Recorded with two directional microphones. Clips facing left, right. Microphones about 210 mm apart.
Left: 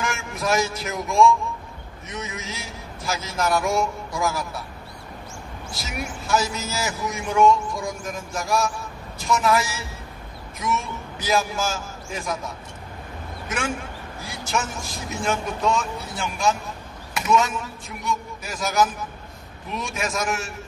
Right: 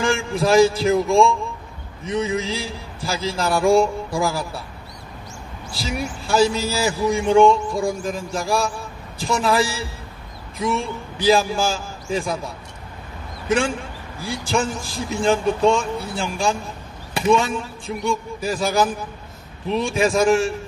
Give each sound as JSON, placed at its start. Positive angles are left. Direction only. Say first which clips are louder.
{"t": 0.0, "sound": "speech", "louder": "right 7 dB", "side_deg": -30}
{"t": 5.7, "sound": "speech", "louder": "right 6 dB", "side_deg": -30}
{"t": 13.5, "sound": "speech", "louder": "right 8 dB", "side_deg": -30}